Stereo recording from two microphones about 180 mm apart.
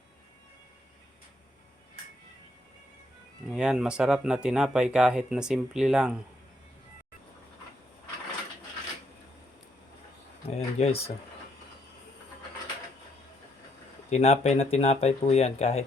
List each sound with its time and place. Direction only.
3.5 s speech: 5° right (ahead or behind)
10.4 s speech: 35° left (ahead or behind)
14.1 s speech: 40° left (ahead or behind)